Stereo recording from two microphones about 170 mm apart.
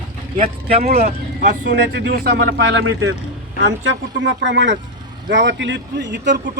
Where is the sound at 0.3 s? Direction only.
35° right (ahead or behind).